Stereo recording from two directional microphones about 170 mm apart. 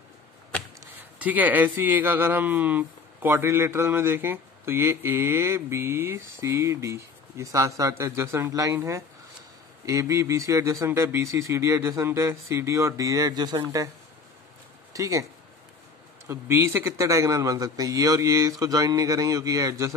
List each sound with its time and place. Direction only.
1.2 s a man's voice: 10° right (ahead or behind)
14.9 s speech: 20° right (ahead or behind)
16.3 s a man's voice: 15° right (ahead or behind)